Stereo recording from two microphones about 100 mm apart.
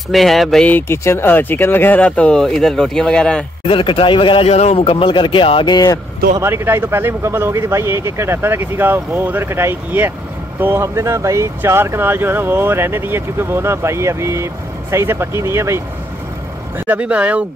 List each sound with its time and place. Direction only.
0.1 s speech: centre (ahead or behind)
0.7 s speech: 20° left (ahead or behind)
3.6 s speech: 65° left (ahead or behind); by 5.9 s 45° left (ahead or behind)
6.4 s speech: 25° right (ahead or behind)
16.7 s speech: 15° right (ahead or behind)